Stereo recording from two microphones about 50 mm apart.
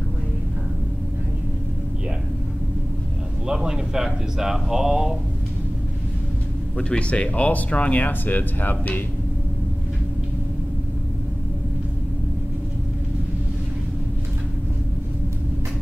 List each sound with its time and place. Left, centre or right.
3.4 s speech: centre
6.8 s speech: left